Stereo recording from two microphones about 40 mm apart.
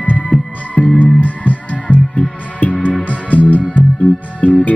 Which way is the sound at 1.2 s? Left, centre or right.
Left.